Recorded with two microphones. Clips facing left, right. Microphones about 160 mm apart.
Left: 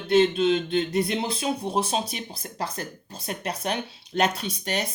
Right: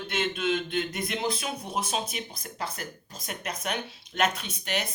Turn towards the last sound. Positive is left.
turn(degrees=35)  # may be behind; listen again after turning